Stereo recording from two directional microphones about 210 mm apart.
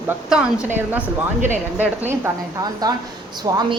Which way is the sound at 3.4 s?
20° right (ahead or behind).